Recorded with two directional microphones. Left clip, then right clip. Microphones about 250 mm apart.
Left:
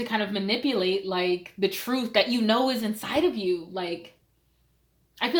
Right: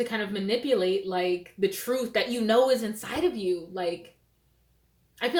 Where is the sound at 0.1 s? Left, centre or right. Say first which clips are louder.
Left 2 dB; left.